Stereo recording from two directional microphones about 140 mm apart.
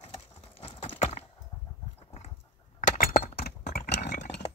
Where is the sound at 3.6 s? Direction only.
60° left (ahead or behind).